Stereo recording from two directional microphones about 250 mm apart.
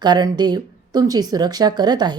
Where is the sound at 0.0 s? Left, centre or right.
Centre.